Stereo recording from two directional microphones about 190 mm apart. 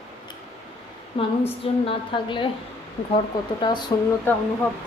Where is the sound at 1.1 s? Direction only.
30° left (ahead or behind).